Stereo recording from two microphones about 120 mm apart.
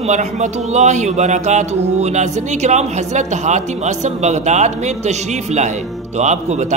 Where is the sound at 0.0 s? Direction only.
75° right (ahead or behind).